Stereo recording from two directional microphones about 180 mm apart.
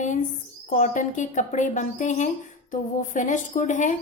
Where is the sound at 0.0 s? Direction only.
45° left (ahead or behind).